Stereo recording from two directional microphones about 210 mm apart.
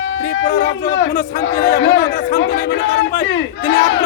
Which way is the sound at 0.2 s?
50° left (ahead or behind).